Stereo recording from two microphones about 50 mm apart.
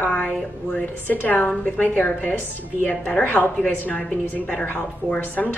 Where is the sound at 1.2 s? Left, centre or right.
Left.